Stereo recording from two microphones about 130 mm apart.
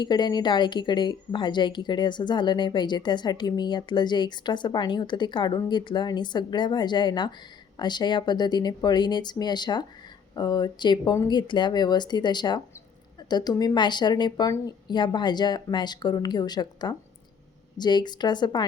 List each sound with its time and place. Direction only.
0.0 s a woman's voice: 35° left (ahead or behind)